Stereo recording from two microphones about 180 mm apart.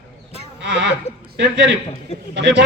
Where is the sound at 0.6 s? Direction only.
75° right (ahead or behind).